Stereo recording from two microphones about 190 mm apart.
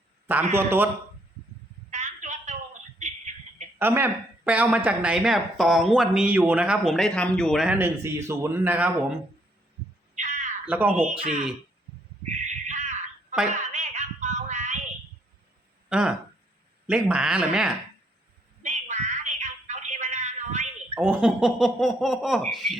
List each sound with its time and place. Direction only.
0.5 s speech: 10° right (ahead or behind)
1.9 s a sound: 40° right (ahead or behind)
3.8 s speech: 10° right (ahead or behind)
10.2 s a sound: 40° right (ahead or behind)
10.7 s speech: 10° right (ahead or behind)
12.3 s bird: 40° right (ahead or behind)
13.7 s music: 40° right (ahead or behind)
15.9 s speech: 5° right (ahead or behind)
18.6 s a sound: 40° right (ahead or behind)
20.9 s speech: 10° right (ahead or behind)